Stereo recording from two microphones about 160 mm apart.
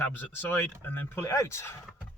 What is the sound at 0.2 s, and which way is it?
Speech, 10° left (ahead or behind).